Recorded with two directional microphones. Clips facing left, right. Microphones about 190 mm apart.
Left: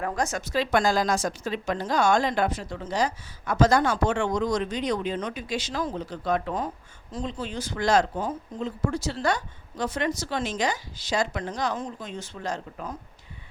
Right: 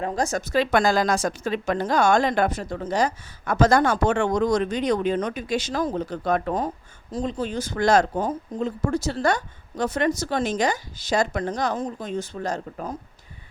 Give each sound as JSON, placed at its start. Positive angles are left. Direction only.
{"t": 0.0, "sound": "speech", "side_deg": -30}
{"t": 0.5, "sound": "speech", "side_deg": -60}